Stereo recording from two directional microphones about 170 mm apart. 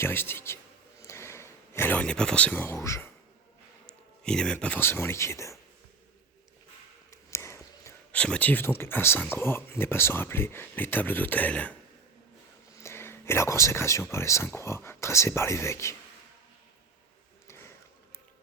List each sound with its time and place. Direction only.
0.0 s speech: 15° left (ahead or behind)
1.0 s a sound: 15° left (ahead or behind)
3.8 s speech: 5° left (ahead or behind)
7.1 s a sound: 15° left (ahead or behind)
8.8 s speech: 15° left (ahead or behind)
12.8 s speech: 15° left (ahead or behind)